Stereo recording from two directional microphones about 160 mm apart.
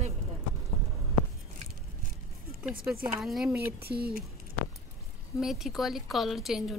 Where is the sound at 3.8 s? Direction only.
75° right (ahead or behind).